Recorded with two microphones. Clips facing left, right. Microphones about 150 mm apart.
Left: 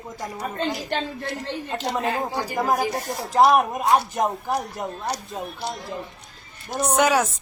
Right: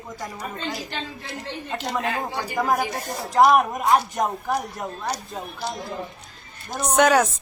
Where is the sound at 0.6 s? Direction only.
50° left (ahead or behind).